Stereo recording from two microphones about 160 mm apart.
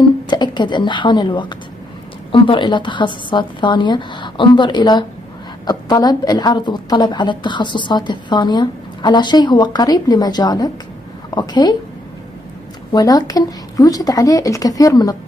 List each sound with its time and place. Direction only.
0.3 s a woman's voice: 30° left (ahead or behind)
12.9 s a woman's voice: 20° left (ahead or behind)